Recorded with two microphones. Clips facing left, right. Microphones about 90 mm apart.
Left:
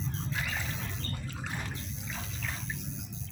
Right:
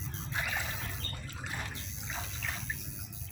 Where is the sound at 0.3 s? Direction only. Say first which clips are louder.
Right 4 dB; 15° right (ahead or behind).